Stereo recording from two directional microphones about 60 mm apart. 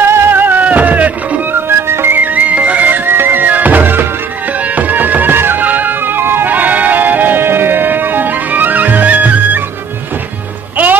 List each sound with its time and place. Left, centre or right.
0.1 s music: right
1.7 s music: right
2.1 s music: right
3.1 s music: right